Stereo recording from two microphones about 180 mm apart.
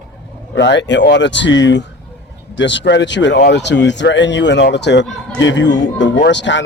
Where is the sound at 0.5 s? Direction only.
75° left (ahead or behind).